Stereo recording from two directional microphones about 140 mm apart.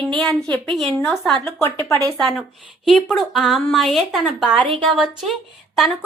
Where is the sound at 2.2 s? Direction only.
Centre (ahead or behind).